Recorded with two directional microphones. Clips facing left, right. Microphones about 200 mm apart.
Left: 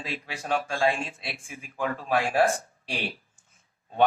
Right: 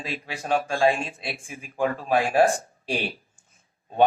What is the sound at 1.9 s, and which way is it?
Speech, 20° right (ahead or behind).